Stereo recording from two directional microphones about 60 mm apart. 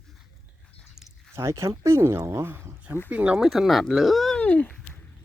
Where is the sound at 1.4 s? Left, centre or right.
Right.